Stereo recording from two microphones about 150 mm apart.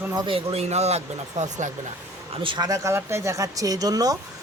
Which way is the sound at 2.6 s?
20° right (ahead or behind).